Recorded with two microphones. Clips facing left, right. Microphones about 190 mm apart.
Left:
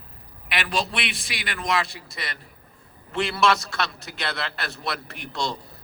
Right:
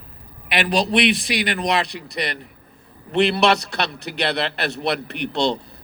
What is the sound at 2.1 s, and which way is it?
Speech, 65° right (ahead or behind).